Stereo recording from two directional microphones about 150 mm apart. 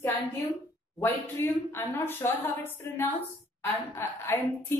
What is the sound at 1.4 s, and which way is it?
A woman's voice, 15° left (ahead or behind).